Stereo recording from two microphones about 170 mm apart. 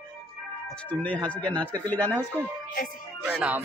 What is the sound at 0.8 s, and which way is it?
Speech, 10° left (ahead or behind).